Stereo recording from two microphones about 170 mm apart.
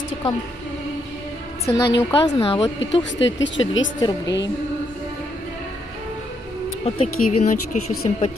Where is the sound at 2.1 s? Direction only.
35° left (ahead or behind).